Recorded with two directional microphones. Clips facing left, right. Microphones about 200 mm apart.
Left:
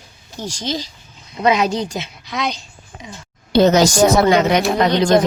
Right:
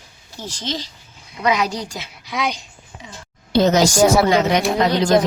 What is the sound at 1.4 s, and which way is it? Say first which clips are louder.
Speech: left 4 dB; 25° left (ahead or behind).